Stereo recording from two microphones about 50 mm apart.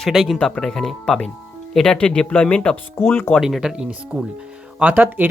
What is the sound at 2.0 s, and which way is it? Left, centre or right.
Speech, left.